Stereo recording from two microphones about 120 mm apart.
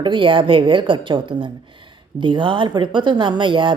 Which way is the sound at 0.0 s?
45° right (ahead or behind).